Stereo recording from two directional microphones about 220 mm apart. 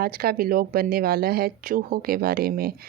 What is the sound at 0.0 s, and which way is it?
Speech, 45° right (ahead or behind).